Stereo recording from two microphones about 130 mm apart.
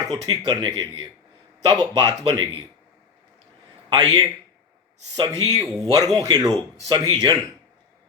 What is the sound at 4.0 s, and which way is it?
A man's voice, 30° right (ahead or behind).